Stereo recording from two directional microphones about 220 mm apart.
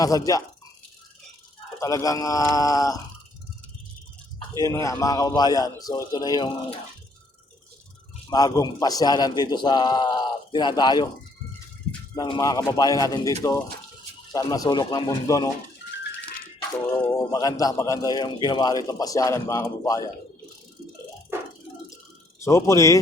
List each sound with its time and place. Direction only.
0.0 s a man's voice: 15° left (ahead or behind)
1.8 s a man's voice: 15° left (ahead or behind)
4.4 s a man's voice: 15° left (ahead or behind)
8.3 s a man's voice: 15° left (ahead or behind)
12.1 s a man's voice: 20° left (ahead or behind)
17.3 s a man's voice: 15° left (ahead or behind)
22.4 s a man's voice: 15° left (ahead or behind)